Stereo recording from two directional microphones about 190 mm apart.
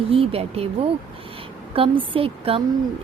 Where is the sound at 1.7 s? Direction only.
30° right (ahead or behind).